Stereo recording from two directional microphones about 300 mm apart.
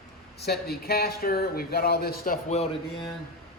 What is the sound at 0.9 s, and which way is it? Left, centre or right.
A man's voice, left.